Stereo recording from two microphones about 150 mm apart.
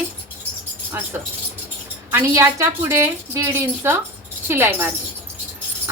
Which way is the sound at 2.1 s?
15° right (ahead or behind).